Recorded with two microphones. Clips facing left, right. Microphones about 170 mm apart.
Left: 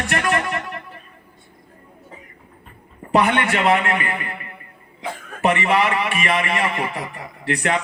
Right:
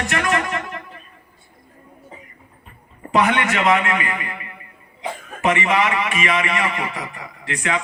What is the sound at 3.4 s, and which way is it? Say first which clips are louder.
Speech: even; 35° left (ahead or behind).